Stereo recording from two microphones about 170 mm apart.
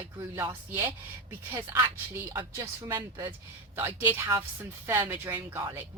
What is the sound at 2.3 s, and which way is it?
A woman's voice, 20° right (ahead or behind).